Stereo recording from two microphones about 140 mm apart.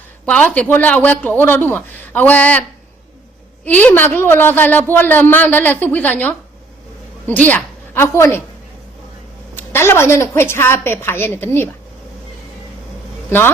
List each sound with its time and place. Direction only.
0.3 s a woman's voice: 10° left (ahead or behind)
9.6 s speech: 15° left (ahead or behind)